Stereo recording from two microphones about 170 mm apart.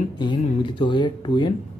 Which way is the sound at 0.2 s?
30° left (ahead or behind).